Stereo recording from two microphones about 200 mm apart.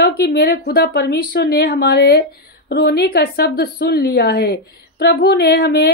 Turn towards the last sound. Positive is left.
turn(degrees=55)  # may be behind; listen again after turning